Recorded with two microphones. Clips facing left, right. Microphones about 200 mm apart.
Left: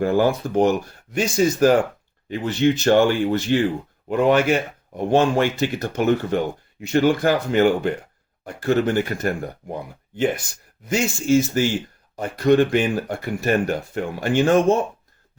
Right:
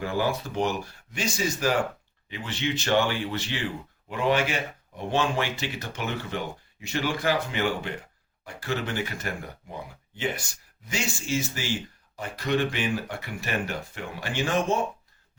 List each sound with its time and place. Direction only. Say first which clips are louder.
0.0 s speech: left 9 dB; 50° left (ahead or behind)
10.8 s speech: left 11 dB; 50° left (ahead or behind)